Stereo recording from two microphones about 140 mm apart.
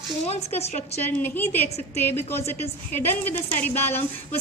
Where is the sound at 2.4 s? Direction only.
50° left (ahead or behind).